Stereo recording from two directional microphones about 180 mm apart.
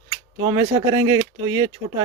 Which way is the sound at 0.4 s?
25° right (ahead or behind).